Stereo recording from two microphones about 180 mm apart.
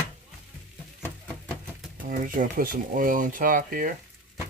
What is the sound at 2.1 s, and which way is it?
Speech, 50° right (ahead or behind).